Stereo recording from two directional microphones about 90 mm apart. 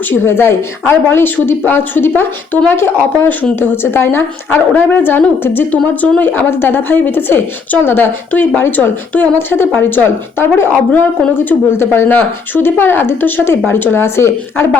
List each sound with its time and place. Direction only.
0.1 s a woman's voice: 25° left (ahead or behind)